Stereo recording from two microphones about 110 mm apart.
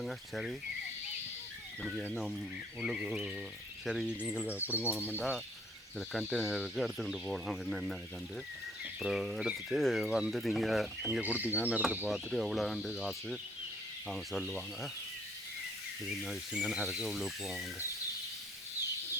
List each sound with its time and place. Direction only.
0.0 s speech: centre (ahead or behind)
1.8 s speech: centre (ahead or behind)
11.0 s speech: 15° right (ahead or behind)
12.1 s speech: centre (ahead or behind)
16.0 s speech: 5° right (ahead or behind)